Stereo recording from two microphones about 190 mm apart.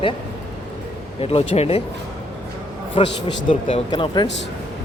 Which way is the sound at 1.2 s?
30° left (ahead or behind).